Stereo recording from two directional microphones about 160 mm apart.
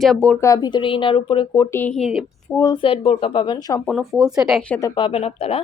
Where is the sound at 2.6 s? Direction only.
25° left (ahead or behind).